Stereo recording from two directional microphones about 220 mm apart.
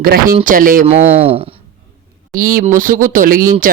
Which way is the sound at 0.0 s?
40° right (ahead or behind).